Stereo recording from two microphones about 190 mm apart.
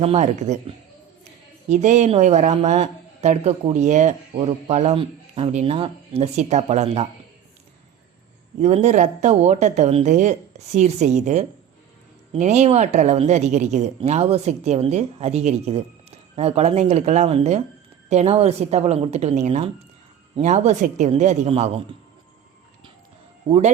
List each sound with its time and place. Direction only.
0.0 s speech: 35° right (ahead or behind)
1.7 s speech: 40° right (ahead or behind)
8.6 s speech: 35° right (ahead or behind)
23.5 s speech: 35° right (ahead or behind)